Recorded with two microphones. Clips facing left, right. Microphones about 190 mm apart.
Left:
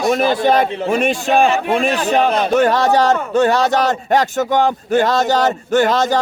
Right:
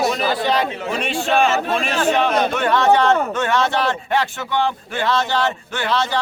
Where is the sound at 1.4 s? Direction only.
15° left (ahead or behind).